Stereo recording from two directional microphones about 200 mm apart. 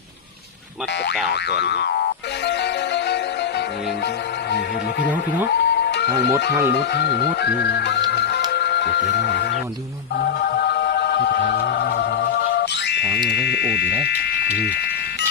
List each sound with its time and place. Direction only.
1.3 s speech: 55° left (ahead or behind)
2.5 s music: 60° left (ahead or behind)
5.5 s music: 55° left (ahead or behind)
6.7 s speech: 55° left (ahead or behind)
8.1 s music: 55° left (ahead or behind)
13.0 s speech: centre (ahead or behind)
13.3 s speech: 55° left (ahead or behind)